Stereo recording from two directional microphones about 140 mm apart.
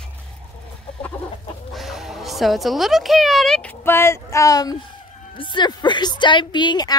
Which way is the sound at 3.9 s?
20° left (ahead or behind).